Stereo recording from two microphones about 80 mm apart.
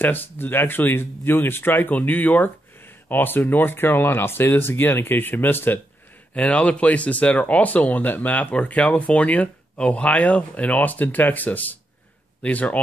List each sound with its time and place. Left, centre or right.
0.0 s speech: left
6.3 s speech: centre